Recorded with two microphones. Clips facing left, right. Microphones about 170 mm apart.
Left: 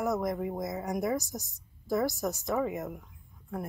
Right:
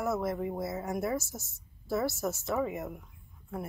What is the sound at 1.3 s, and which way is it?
Speech, 15° left (ahead or behind).